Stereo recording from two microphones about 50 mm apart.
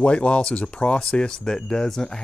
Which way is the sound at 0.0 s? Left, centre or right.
Left.